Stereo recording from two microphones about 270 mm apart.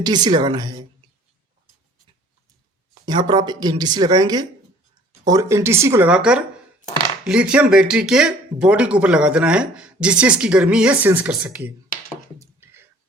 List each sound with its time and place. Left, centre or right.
0.0 s speech: centre
3.1 s speech: centre
12.4 s a sound: centre